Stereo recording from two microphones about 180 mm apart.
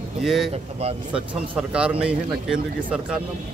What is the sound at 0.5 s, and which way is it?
Speech, 35° right (ahead or behind).